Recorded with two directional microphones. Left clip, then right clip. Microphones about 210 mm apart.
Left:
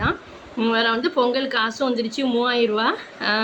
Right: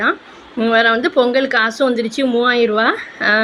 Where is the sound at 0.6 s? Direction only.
20° right (ahead or behind).